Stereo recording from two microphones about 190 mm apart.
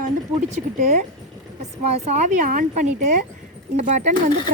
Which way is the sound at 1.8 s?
35° right (ahead or behind).